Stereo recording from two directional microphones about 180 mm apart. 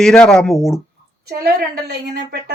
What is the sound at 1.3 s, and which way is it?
A woman's voice, 60° right (ahead or behind).